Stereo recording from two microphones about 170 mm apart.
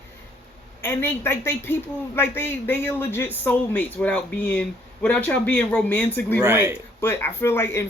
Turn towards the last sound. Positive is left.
turn(degrees=15)  # may be behind; listen again after turning